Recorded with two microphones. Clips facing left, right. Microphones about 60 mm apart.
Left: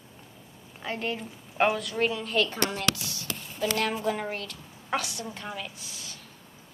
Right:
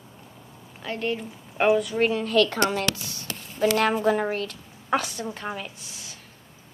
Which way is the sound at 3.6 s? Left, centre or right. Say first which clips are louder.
Right 7 dB; right.